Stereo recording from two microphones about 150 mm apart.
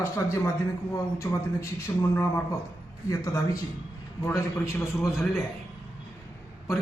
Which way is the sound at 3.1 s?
20° left (ahead or behind).